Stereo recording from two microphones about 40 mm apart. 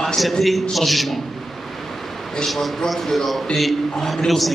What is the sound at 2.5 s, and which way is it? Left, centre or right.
A man's voice, centre.